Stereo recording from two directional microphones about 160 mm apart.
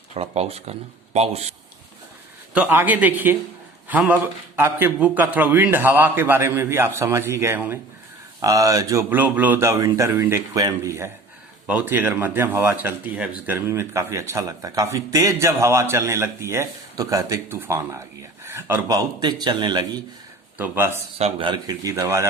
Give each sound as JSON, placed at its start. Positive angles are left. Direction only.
{"t": 0.1, "sound": "speech", "side_deg": -40}
{"t": 2.5, "sound": "speech", "side_deg": -10}
{"t": 18.9, "sound": "speech", "side_deg": -25}
{"t": 20.6, "sound": "speech", "side_deg": -15}
{"t": 21.2, "sound": "speech", "side_deg": -35}